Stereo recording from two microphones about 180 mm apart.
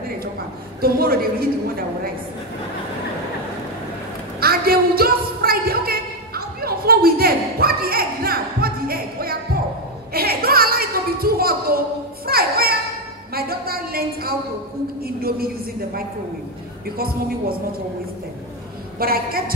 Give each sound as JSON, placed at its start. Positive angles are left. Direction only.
{"t": 0.7, "sound": "a woman's voice", "side_deg": -55}
{"t": 4.4, "sound": "a sound", "side_deg": -55}
{"t": 12.3, "sound": "children playing", "side_deg": -55}
{"t": 13.3, "sound": "music", "side_deg": -55}
{"t": 15.0, "sound": "a woman's voice", "side_deg": -55}
{"t": 18.9, "sound": "a woman's voice", "side_deg": -55}